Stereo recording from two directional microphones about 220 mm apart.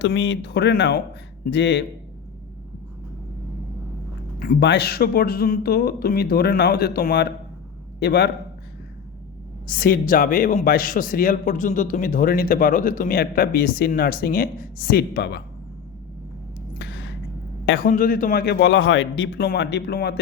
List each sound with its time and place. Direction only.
0.0 s speech: 55° left (ahead or behind)
4.4 s speech: 45° left (ahead or behind)
9.6 s a man's voice: 40° left (ahead or behind)
16.7 s a sound: 50° left (ahead or behind)
17.8 s speech: 40° left (ahead or behind)